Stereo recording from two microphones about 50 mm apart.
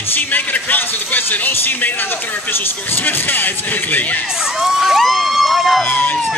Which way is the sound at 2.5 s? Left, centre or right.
Left.